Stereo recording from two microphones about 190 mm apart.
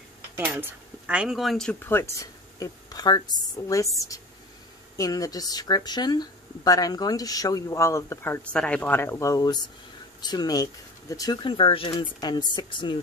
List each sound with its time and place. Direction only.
0.4 s speech: 10° right (ahead or behind); by 12.9 s 25° left (ahead or behind)